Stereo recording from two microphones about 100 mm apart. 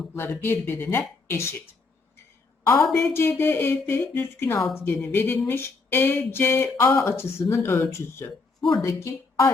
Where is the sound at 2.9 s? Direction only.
25° left (ahead or behind).